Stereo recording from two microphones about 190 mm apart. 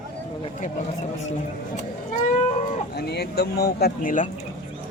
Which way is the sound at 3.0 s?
60° left (ahead or behind).